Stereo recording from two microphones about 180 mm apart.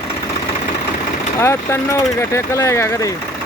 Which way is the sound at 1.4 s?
15° left (ahead or behind).